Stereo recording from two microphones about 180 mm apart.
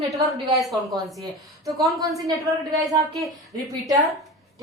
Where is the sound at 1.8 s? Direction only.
20° right (ahead or behind).